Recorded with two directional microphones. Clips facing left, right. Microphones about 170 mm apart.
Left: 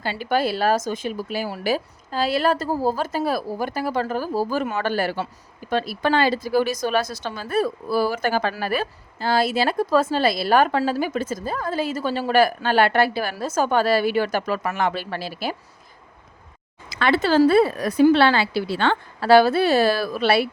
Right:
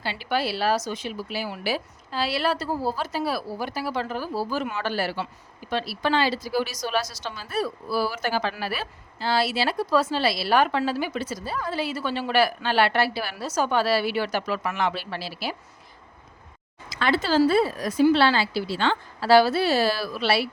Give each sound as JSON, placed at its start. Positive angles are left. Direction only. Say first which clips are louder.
{"t": 0.0, "sound": "speech", "louder": "left 4 dB", "side_deg": 45}
{"t": 16.9, "sound": "speech", "louder": "left 4 dB", "side_deg": 60}